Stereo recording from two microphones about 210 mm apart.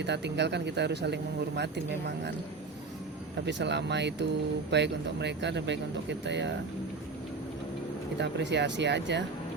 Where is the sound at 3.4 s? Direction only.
55° right (ahead or behind).